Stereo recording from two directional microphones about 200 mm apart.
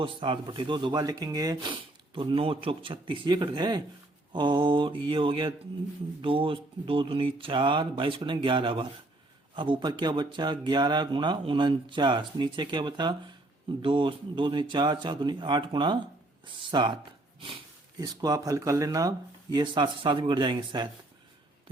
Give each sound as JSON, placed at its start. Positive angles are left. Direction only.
{"t": 0.0, "sound": "speech", "side_deg": -25}